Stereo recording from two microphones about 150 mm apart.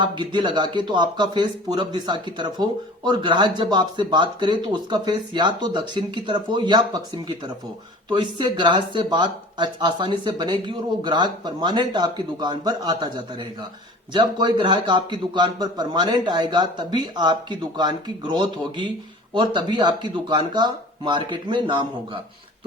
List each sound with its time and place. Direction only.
0.0 s speech: 30° right (ahead or behind)